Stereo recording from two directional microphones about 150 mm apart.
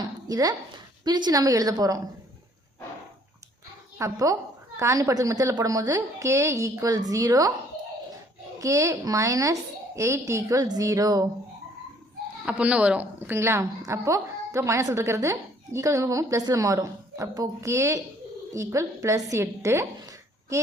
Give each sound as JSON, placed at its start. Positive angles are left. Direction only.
{"t": 0.0, "sound": "a sound", "side_deg": -25}
{"t": 1.0, "sound": "a woman's voice", "side_deg": -25}
{"t": 3.9, "sound": "a woman's voice", "side_deg": -20}
{"t": 8.6, "sound": "a woman's voice", "side_deg": -20}
{"t": 12.5, "sound": "a woman's voice", "side_deg": -10}